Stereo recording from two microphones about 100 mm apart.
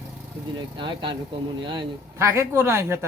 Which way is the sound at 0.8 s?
55° right (ahead or behind).